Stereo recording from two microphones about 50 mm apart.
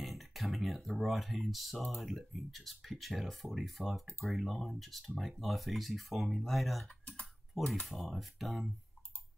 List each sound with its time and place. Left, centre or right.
0.0 s a sound: centre
2.0 s speech: centre
6.9 s typing: left
7.8 s speech: centre